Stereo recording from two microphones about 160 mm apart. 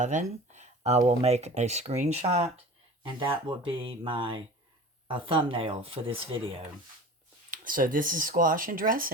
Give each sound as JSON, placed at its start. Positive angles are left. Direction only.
{"t": 0.0, "sound": "speech", "side_deg": -50}
{"t": 3.2, "sound": "speech", "side_deg": -30}
{"t": 7.5, "sound": "speech", "side_deg": -60}